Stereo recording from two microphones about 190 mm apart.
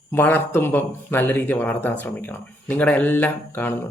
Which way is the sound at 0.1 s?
10° left (ahead or behind).